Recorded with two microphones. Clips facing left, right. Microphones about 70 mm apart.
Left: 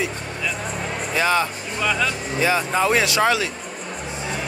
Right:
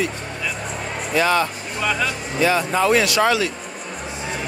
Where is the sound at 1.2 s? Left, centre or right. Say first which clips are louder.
Right 2 dB; centre.